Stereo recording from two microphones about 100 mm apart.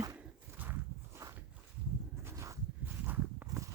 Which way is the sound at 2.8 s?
20° right (ahead or behind).